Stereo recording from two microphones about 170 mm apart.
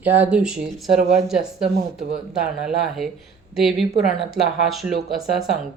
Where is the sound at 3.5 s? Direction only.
Centre (ahead or behind).